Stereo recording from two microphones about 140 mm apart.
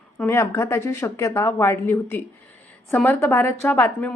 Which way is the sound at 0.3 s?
20° left (ahead or behind).